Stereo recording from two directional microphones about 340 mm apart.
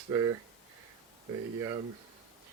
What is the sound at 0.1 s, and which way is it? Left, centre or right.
Speech, centre.